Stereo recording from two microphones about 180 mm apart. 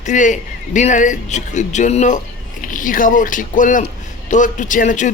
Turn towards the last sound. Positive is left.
turn(degrees=45)  # may be behind; listen again after turning